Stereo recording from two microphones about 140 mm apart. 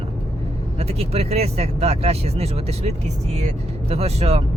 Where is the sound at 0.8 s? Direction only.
45° right (ahead or behind).